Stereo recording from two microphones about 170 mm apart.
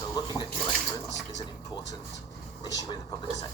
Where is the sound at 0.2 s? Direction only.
25° left (ahead or behind).